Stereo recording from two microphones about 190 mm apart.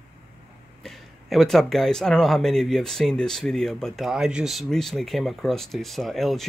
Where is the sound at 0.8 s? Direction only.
Centre (ahead or behind).